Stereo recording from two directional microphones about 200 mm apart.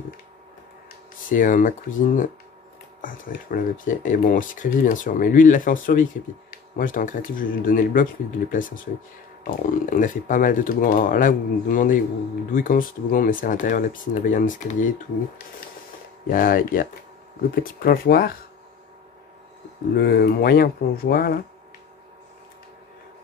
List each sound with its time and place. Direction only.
1.3 s speech: 40° left (ahead or behind)
16.3 s speech: 45° left (ahead or behind)
17.8 s speech: 50° left (ahead or behind)
20.0 s speech: 50° left (ahead or behind)